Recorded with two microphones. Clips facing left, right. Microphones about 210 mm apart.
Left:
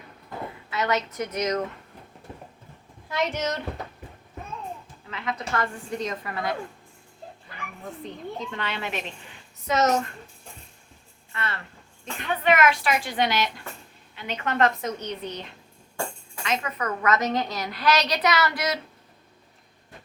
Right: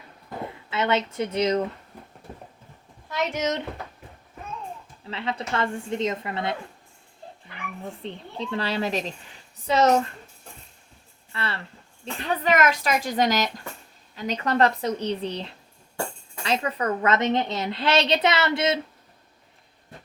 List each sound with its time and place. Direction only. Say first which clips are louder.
0.7 s a woman's voice: right 2 dB; 25° right (ahead or behind)
3.3 s a woman's voice: right 2 dB; 20° right (ahead or behind)
5.0 s a woman's voice: right 2 dB; 30° right (ahead or behind)
8.0 s speech: left 1 dB; 30° right (ahead or behind)
11.3 s a woman's voice: right 1 dB; 30° right (ahead or behind)